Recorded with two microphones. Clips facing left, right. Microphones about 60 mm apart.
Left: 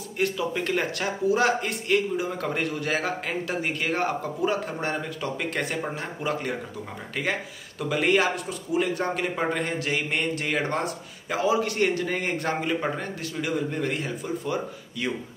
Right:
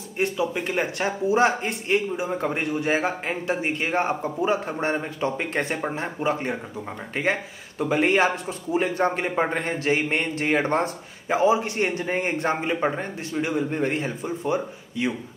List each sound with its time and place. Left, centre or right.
0.2 s a man's voice: centre